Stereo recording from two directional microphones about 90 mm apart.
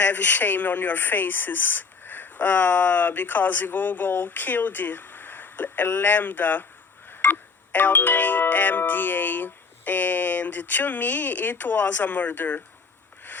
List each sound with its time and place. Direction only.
0.0 s speech: 20° left (ahead or behind)